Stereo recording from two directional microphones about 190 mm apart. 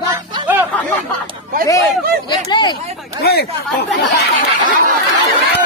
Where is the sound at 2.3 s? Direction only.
25° left (ahead or behind).